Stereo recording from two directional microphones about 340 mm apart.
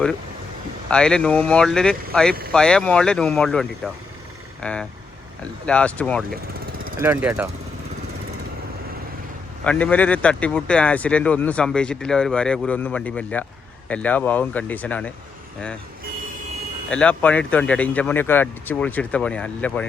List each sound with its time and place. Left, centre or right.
0.9 s speech: centre
6.7 s vehicle: right
7.0 s speech: centre
9.6 s speech: centre
16.9 s speech: centre